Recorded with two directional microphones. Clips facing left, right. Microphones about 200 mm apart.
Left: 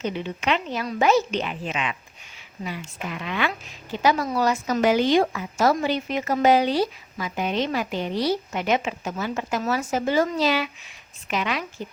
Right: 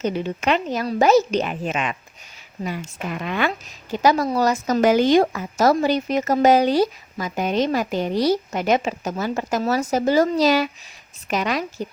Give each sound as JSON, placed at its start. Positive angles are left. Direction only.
{"t": 0.0, "sound": "a woman's voice", "side_deg": -40}